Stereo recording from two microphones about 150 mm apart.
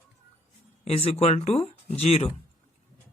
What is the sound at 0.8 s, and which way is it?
Speech, 45° left (ahead or behind).